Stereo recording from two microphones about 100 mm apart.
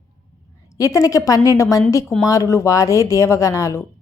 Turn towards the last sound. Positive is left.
turn(degrees=30)  # may be behind; listen again after turning